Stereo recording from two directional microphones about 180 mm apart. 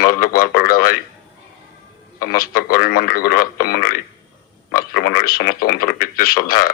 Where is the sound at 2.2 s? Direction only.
55° left (ahead or behind).